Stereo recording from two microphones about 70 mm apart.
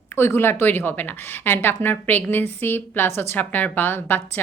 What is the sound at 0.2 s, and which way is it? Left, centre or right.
A woman's voice, left.